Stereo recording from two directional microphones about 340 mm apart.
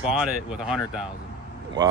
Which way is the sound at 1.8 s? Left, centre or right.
Centre.